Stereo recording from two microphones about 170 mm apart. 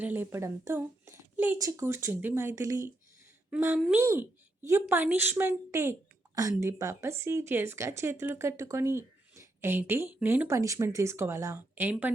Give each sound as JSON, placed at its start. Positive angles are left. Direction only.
{"t": 0.0, "sound": "speech", "side_deg": -10}
{"t": 3.8, "sound": "a child's voice", "side_deg": 0}
{"t": 4.0, "sound": "a woman's voice", "side_deg": -15}